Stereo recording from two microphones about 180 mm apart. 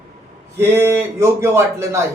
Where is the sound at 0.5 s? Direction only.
15° right (ahead or behind).